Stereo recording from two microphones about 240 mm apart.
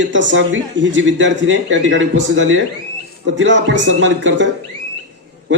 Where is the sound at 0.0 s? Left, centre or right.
Right.